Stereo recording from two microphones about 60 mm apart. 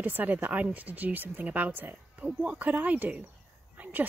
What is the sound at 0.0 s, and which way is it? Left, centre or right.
Speech, right.